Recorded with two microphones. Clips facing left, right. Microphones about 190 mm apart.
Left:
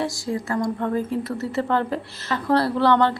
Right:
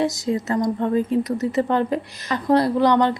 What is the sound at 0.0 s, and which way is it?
A woman's voice, 20° right (ahead or behind).